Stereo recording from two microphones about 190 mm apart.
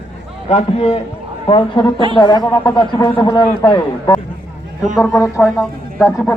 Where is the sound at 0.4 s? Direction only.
35° left (ahead or behind); by 6.1 s 15° left (ahead or behind).